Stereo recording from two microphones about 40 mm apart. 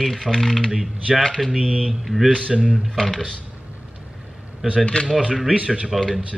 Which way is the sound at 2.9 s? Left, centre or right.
Centre.